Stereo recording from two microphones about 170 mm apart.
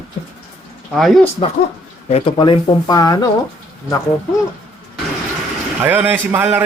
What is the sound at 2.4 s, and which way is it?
Speech, 25° left (ahead or behind).